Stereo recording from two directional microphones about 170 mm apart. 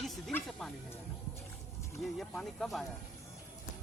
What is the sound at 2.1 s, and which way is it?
Speech, centre (ahead or behind).